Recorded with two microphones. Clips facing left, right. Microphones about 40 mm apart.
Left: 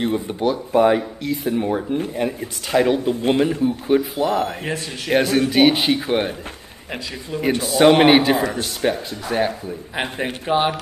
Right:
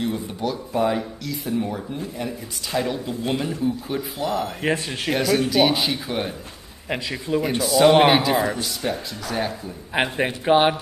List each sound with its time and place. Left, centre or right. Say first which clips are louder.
0.0 s speech: left 5 dB; left
3.6 s speech: left 7 dB; left
4.6 s speech: right 3 dB; right
5.1 s speech: left 3 dB; left
6.9 s speech: right 4 dB; right
7.6 s speech: left 2 dB; left
10.2 s speech: right 2 dB; centre